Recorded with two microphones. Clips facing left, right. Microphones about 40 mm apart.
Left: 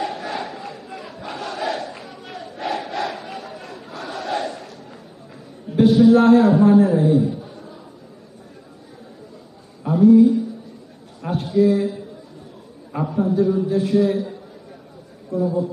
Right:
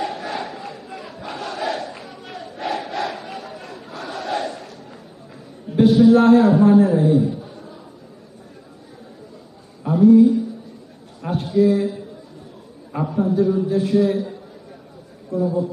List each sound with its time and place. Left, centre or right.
0.0 s crowd: centre
5.7 s a man's voice: centre
9.8 s a sound: centre
12.9 s a man's voice: centre